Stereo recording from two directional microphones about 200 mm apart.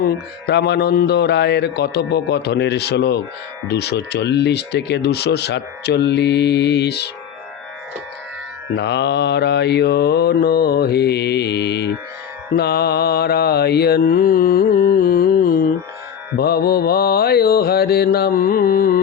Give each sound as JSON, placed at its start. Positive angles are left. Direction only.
{"t": 0.0, "sound": "speech", "side_deg": 55}
{"t": 8.7, "sound": "speech", "side_deg": 60}
{"t": 12.5, "sound": "mantra", "side_deg": 50}